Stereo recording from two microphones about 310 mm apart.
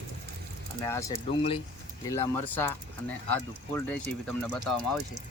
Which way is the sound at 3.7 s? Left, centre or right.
Centre.